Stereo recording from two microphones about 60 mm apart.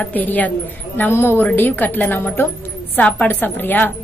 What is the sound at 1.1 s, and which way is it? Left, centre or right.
A woman's voice, left.